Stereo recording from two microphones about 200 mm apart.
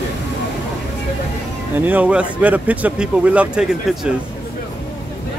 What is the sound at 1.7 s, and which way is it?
Speech, 10° right (ahead or behind).